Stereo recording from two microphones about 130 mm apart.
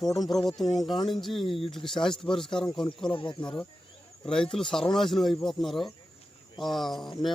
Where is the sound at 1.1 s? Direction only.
Centre (ahead or behind).